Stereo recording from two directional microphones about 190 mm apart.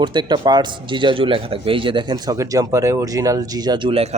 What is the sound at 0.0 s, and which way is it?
Speech, 25° right (ahead or behind).